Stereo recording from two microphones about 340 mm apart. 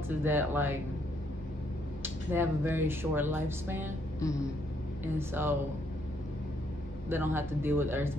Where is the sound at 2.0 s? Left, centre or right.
Centre.